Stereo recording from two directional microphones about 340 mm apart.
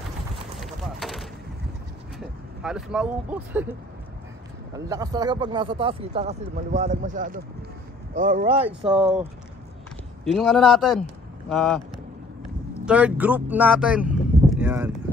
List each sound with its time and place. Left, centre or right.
0.6 s a sound: centre
2.1 s speech: centre
4.7 s speech: centre
10.2 s speech: centre
12.8 s speech: centre